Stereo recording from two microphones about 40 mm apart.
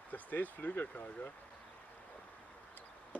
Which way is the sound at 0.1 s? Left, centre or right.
Left.